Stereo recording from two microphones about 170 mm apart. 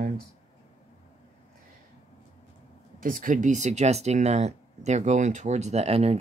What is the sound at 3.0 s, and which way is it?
Speech, 55° right (ahead or behind).